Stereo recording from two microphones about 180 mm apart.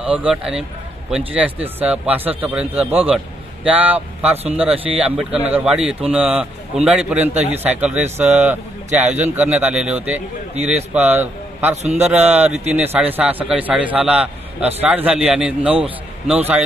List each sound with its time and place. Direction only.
0.0 s a man's voice: 5° right (ahead or behind)
11.7 s a man's voice: 40° right (ahead or behind)
12.3 s a man's voice: 5° right (ahead or behind)